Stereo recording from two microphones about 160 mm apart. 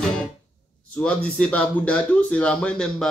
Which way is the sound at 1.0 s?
10° left (ahead or behind).